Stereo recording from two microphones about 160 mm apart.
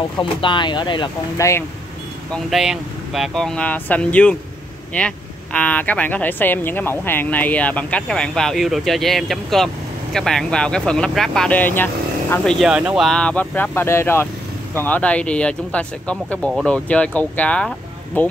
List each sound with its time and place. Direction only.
0.2 s speech: 30° left (ahead or behind)
2.3 s speech: centre (ahead or behind)
12.5 s speech: 5° right (ahead or behind)